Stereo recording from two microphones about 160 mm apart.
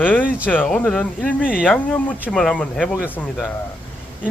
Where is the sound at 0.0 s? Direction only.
10° left (ahead or behind).